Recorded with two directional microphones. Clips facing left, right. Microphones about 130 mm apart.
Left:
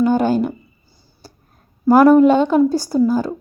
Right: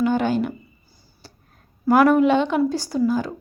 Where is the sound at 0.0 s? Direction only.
40° left (ahead or behind).